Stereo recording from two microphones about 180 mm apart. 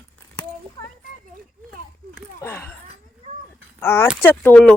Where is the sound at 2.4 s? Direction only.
10° left (ahead or behind).